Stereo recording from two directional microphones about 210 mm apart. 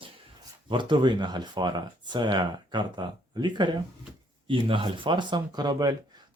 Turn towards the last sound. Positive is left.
turn(degrees=-20)  # may be behind; listen again after turning